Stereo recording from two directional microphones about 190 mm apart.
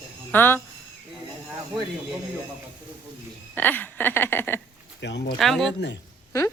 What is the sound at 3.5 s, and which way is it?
A woman's voice, 10° left (ahead or behind).